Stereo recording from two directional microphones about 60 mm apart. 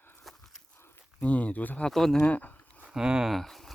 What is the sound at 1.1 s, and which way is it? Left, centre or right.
Speech, left.